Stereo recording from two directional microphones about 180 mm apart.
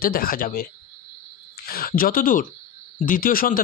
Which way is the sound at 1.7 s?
55° left (ahead or behind).